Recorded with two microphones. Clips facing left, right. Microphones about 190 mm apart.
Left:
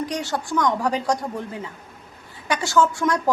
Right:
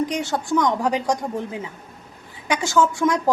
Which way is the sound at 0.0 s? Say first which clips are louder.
Right 3 dB; 20° right (ahead or behind).